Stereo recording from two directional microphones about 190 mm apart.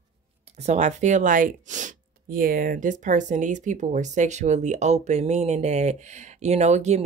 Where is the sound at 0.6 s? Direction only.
40° right (ahead or behind).